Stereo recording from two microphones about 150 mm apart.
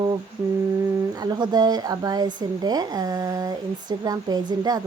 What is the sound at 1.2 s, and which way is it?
Speech, 30° right (ahead or behind).